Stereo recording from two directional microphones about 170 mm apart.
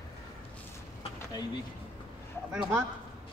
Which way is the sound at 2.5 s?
5° right (ahead or behind).